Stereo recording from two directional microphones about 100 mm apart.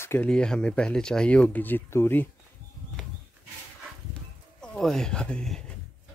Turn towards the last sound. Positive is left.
turn(degrees=10)  # may be behind; listen again after turning